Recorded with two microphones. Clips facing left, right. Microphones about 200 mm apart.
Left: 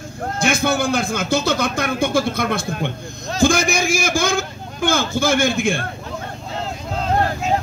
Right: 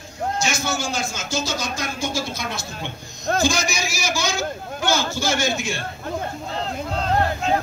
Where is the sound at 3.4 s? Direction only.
55° left (ahead or behind).